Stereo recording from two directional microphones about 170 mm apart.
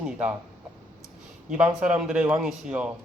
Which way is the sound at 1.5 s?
5° right (ahead or behind).